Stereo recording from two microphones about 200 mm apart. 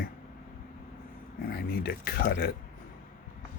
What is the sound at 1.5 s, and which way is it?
Speech, 50° left (ahead or behind).